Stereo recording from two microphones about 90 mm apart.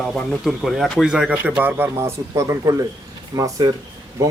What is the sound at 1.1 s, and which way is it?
A man's voice, 15° right (ahead or behind).